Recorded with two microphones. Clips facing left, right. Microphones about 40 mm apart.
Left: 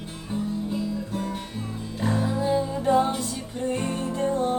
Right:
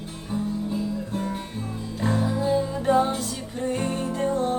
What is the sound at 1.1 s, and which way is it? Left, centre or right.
Guitar, right.